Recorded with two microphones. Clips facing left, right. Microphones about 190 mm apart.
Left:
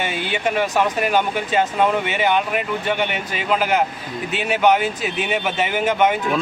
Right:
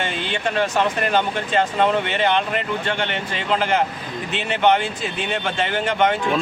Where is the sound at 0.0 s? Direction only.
10° left (ahead or behind).